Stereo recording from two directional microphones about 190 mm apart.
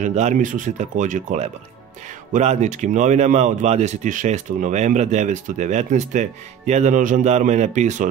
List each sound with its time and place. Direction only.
0.0 s speech: 40° right (ahead or behind)